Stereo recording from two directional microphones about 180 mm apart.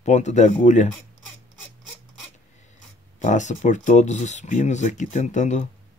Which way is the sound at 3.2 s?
40° left (ahead or behind).